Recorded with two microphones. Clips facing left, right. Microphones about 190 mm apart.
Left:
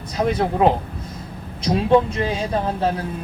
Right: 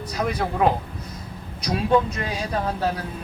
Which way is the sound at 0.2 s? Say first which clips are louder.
Left 4 dB; 25° left (ahead or behind).